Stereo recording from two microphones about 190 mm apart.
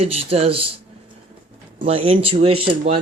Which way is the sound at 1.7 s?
30° right (ahead or behind).